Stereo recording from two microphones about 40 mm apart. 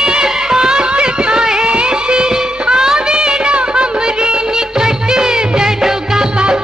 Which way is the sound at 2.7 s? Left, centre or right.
Centre.